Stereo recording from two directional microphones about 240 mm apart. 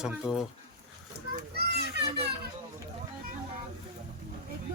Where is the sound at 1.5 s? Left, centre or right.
Right.